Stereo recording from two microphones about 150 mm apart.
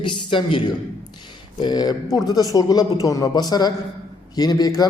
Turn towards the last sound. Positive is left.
turn(degrees=25)  # may be behind; listen again after turning